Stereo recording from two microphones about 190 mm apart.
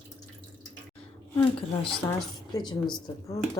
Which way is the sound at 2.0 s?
20° left (ahead or behind).